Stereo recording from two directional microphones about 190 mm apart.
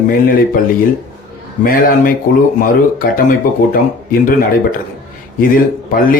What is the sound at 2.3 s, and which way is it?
Speech, 45° left (ahead or behind).